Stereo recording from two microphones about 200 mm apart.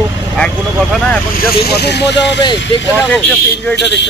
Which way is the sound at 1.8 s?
55° left (ahead or behind).